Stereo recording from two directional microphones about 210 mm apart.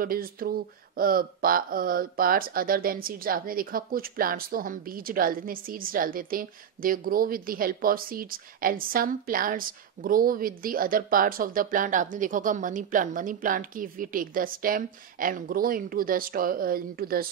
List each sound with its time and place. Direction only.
0.0 s speech: 45° right (ahead or behind)